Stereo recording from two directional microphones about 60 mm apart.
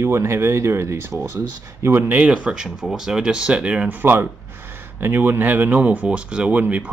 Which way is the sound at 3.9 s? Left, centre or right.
Right.